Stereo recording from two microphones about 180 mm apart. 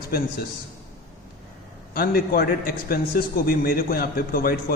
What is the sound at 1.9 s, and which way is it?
A man's voice, 55° left (ahead or behind).